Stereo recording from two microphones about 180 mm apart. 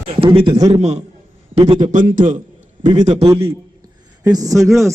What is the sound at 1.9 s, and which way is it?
Speech, 45° right (ahead or behind).